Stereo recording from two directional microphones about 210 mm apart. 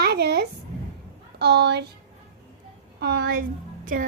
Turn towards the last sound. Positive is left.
turn(degrees=-40)  # may be behind; listen again after turning